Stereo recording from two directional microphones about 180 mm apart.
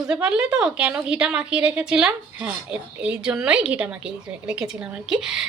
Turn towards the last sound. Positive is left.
turn(degrees=-5)  # may be behind; listen again after turning